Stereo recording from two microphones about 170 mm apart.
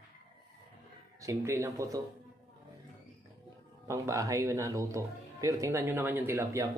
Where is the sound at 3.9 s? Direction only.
20° right (ahead or behind).